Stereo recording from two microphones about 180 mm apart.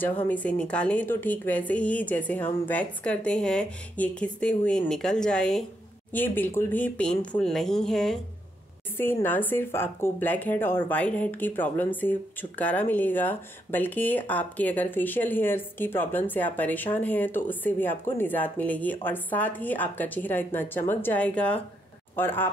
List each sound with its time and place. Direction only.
0.2 s speech: 10° left (ahead or behind)